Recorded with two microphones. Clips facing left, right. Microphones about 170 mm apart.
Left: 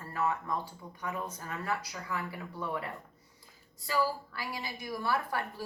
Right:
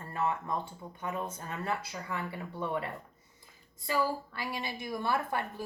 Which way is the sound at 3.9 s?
25° right (ahead or behind).